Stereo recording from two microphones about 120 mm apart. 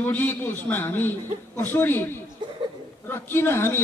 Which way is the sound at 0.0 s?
15° left (ahead or behind).